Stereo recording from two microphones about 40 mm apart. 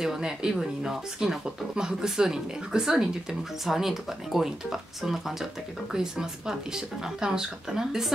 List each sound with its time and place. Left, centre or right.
0.0 s speech: centre